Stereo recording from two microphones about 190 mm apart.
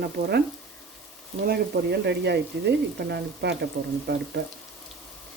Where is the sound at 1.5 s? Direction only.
60° right (ahead or behind).